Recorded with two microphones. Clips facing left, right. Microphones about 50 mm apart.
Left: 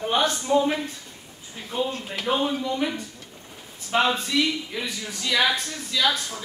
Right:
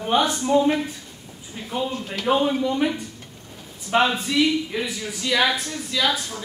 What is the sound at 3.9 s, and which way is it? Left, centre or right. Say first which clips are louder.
A man's voice: right 2 dB; centre.